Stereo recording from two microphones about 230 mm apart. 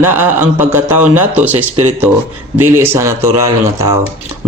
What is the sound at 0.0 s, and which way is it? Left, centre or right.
Speech, centre.